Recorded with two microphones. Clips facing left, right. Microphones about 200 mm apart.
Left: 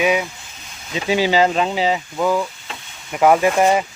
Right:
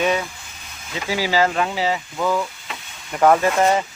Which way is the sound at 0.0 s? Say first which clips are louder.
Left 2 dB; 10° left (ahead or behind).